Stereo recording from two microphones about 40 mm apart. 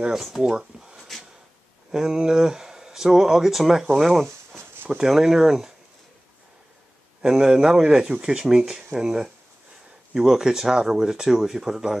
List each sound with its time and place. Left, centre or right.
0.4 s speech: centre
0.9 s a sound: centre
1.9 s speech: centre
7.2 s speech: centre